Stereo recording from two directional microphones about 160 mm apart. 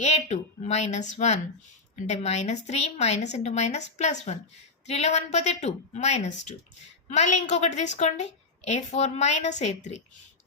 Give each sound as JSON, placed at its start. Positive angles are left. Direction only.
{"t": 0.0, "sound": "a woman's voice", "side_deg": 45}